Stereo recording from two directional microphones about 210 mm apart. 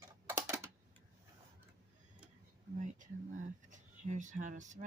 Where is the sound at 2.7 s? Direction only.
35° right (ahead or behind).